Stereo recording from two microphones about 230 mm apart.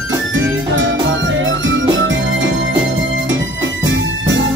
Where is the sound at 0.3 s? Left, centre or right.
Right.